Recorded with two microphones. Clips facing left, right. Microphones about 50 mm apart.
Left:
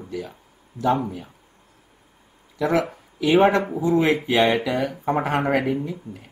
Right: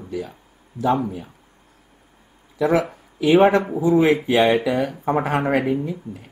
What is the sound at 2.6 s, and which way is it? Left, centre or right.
Speech, centre.